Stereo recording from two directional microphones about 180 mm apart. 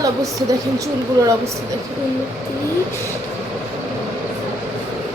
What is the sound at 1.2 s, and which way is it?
Speech, 15° right (ahead or behind).